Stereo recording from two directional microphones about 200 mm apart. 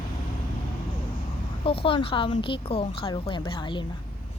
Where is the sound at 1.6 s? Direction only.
30° left (ahead or behind).